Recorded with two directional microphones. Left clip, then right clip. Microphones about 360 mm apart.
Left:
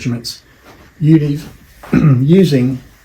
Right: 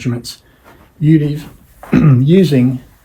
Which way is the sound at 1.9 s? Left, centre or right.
Right.